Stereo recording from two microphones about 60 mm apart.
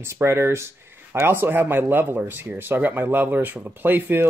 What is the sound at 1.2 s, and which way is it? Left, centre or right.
Speech, right.